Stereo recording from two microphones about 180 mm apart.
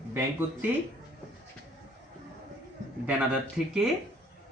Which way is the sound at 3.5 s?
5° right (ahead or behind).